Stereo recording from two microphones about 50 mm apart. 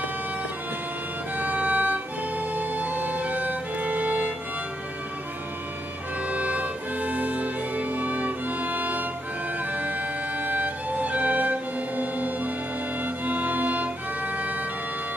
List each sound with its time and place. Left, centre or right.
1.3 s music: right
6.2 s music: right